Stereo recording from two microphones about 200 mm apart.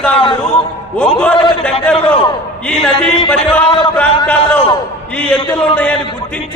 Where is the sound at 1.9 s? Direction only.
5° left (ahead or behind).